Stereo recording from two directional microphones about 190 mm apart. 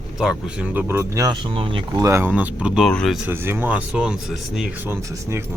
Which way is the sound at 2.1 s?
10° right (ahead or behind).